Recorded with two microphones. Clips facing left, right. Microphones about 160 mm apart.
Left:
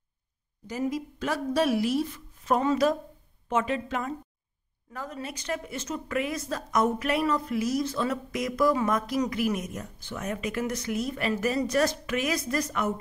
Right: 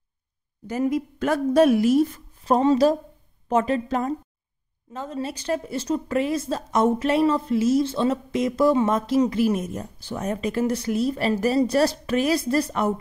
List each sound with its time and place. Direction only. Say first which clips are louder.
0.7 s a woman's voice: right 6 dB; 55° right (ahead or behind); by 4.1 s 40° right (ahead or behind)
4.9 s a woman's voice: right 6 dB; 25° right (ahead or behind)